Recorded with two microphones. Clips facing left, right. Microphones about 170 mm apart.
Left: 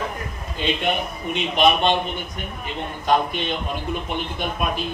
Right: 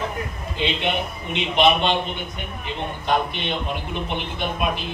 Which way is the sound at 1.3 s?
45° left (ahead or behind).